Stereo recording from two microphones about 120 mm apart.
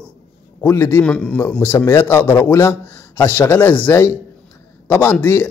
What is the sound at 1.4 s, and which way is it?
A man's voice, 20° left (ahead or behind).